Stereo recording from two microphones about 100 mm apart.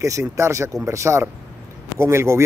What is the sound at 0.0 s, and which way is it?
A man's voice, 30° right (ahead or behind).